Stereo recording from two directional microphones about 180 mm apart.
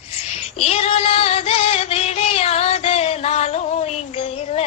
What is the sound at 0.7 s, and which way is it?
Music, 35° left (ahead or behind).